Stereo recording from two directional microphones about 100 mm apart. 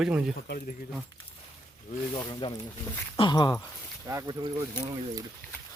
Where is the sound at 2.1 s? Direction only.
45° left (ahead or behind).